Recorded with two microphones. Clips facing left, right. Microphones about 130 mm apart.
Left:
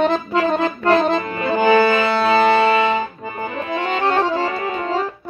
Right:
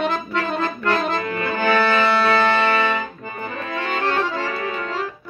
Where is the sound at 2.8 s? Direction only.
20° left (ahead or behind).